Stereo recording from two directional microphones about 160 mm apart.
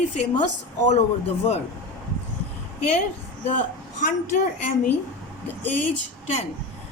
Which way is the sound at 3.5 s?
50° left (ahead or behind).